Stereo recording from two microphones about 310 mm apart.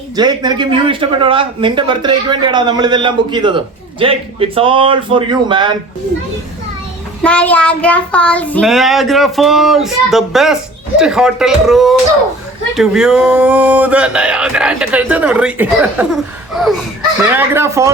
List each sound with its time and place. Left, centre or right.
0.2 s speech: centre
7.2 s child singing: centre
17.3 s speech: centre